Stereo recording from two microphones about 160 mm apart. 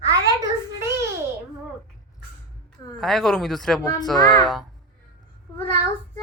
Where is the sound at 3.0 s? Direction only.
Centre (ahead or behind).